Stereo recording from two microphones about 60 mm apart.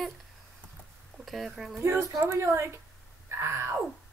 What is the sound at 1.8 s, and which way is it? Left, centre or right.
Speech, right.